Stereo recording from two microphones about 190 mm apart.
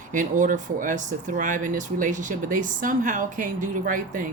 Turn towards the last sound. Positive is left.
turn(degrees=-45)  # may be behind; listen again after turning